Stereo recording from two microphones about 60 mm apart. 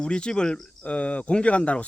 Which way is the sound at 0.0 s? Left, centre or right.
Centre.